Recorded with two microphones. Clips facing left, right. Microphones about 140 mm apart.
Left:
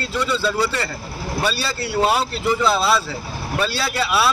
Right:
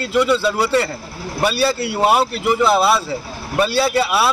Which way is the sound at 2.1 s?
65° right (ahead or behind).